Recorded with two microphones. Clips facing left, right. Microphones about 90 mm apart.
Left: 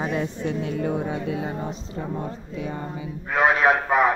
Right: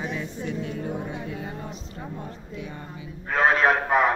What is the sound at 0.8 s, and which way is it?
Speech, 85° left.